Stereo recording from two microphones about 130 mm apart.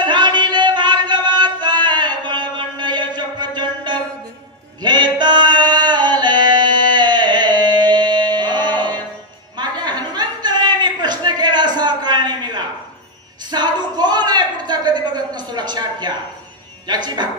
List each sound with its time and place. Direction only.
0.0 s music: 35° right (ahead or behind)
4.8 s singing: 35° right (ahead or behind)
9.6 s a sound: 35° right (ahead or behind)
16.8 s music: 35° right (ahead or behind)